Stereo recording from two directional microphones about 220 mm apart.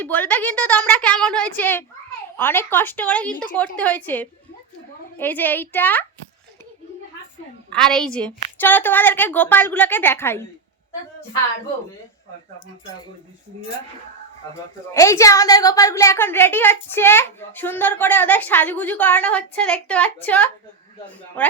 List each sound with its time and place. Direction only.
0.0 s a woman's voice: 10° left (ahead or behind)
7.7 s a woman's voice: 5° left (ahead or behind)
14.5 s a woman's voice: 15° left (ahead or behind)